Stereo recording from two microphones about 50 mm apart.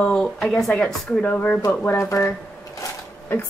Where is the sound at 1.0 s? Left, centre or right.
Left.